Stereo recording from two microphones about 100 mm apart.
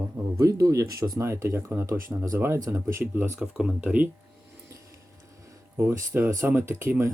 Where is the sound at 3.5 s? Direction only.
10° right (ahead or behind).